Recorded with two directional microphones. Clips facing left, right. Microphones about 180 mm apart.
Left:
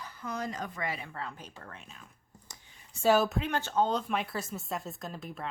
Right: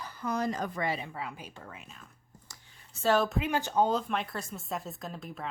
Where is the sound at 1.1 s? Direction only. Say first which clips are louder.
Right 1 dB; 10° right (ahead or behind).